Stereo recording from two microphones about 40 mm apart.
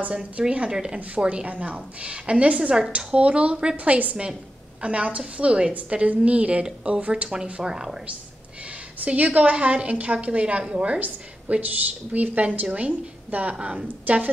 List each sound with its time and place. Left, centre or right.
0.1 s a woman's voice: right
1.2 s a woman's voice: right
5.7 s a woman's voice: right
6.6 s a woman's voice: right
7.0 s a woman's voice: right
7.6 s speech: centre
9.0 s a woman's voice: right
11.0 s a woman's voice: right
14.1 s a woman's voice: right